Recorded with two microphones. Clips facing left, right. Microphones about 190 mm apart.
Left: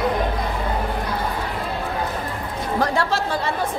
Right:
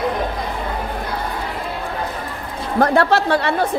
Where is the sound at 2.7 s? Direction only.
55° right (ahead or behind).